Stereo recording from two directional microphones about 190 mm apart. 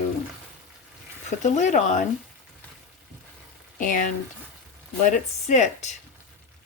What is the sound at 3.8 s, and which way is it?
Speech, 45° left (ahead or behind).